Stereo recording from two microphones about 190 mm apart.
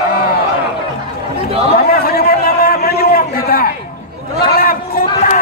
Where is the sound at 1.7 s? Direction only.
50° left (ahead or behind).